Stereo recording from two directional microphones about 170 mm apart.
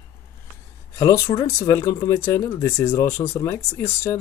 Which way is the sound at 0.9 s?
20° left (ahead or behind).